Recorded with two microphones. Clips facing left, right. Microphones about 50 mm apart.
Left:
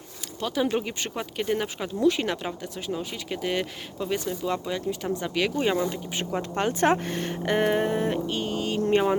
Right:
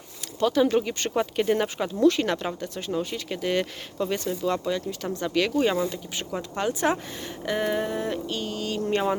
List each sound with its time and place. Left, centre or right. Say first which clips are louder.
0.3 s speech: right 5 dB; centre
1.1 s speech: right 5 dB; centre
5.9 s speech: left 2 dB; left
6.6 s speech: left 2 dB; left